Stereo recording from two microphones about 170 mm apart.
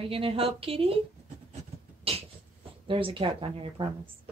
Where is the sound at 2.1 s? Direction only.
35° right (ahead or behind).